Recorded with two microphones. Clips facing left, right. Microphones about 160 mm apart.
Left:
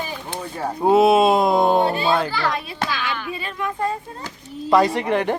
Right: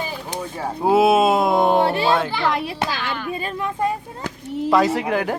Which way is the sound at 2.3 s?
25° right (ahead or behind).